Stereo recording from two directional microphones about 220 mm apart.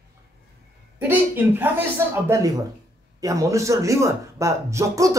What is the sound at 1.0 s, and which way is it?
Speech, 10° right (ahead or behind).